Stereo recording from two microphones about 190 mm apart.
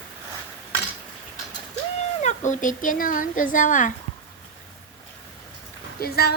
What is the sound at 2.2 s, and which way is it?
A woman's voice, 40° left (ahead or behind).